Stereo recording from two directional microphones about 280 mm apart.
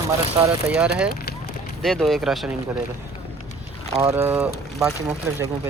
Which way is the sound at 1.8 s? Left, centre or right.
Centre.